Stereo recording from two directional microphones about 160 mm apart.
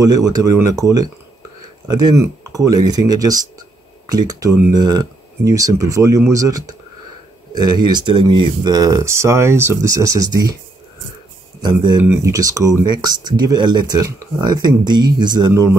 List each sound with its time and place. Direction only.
0.0 s speech: 25° right (ahead or behind)
11.6 s speech: 30° right (ahead or behind)
12.0 s speech: 15° right (ahead or behind)